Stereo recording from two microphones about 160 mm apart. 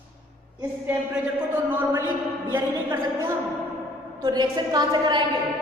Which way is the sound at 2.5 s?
15° right (ahead or behind).